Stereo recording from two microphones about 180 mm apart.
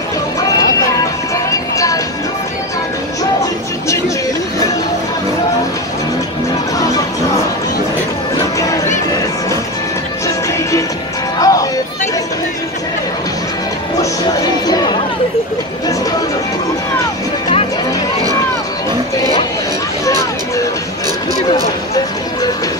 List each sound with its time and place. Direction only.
0.4 s music: 20° left (ahead or behind)
11.3 s music: 20° left (ahead or behind)
14.7 s a sound: 20° left (ahead or behind)
21.5 s music: 20° left (ahead or behind)